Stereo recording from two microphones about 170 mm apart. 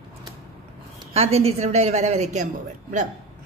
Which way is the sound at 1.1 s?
40° right (ahead or behind).